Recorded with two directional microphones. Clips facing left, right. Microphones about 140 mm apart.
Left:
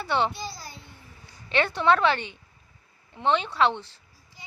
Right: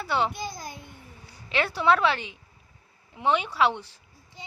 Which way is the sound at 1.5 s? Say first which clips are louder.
Left 1 dB; 5° right (ahead or behind).